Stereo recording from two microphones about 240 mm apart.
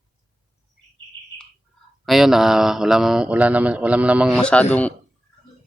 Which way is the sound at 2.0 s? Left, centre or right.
Centre.